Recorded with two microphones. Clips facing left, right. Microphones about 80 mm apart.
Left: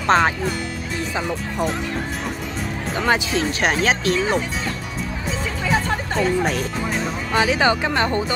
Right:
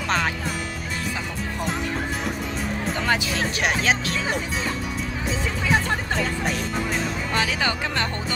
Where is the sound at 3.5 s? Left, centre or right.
Left.